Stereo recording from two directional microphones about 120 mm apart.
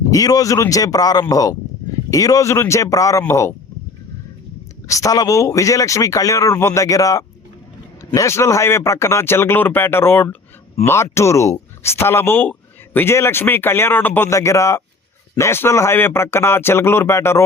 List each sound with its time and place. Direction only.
0.1 s speech: 30° left (ahead or behind)
4.9 s speech: 25° left (ahead or behind)